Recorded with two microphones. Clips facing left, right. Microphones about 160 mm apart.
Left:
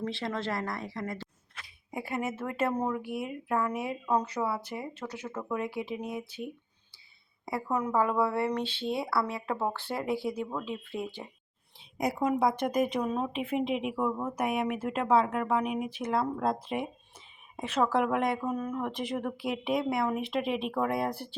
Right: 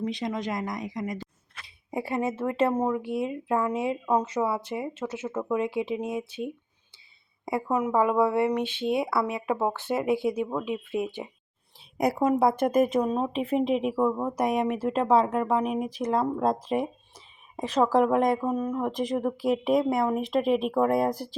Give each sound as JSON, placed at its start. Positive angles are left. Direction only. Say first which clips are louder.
{"t": 0.0, "sound": "speech", "louder": "right 3 dB", "side_deg": -15}
{"t": 1.9, "sound": "a woman's voice", "louder": "right 5 dB", "side_deg": -30}
{"t": 12.2, "sound": "speech", "louder": "right 4 dB", "side_deg": -45}